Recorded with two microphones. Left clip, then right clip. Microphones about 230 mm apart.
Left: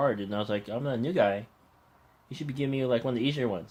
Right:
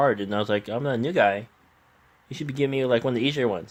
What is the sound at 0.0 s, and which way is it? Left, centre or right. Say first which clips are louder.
Speech: right 6 dB; right.